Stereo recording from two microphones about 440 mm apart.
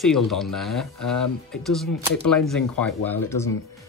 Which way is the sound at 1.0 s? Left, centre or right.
Left.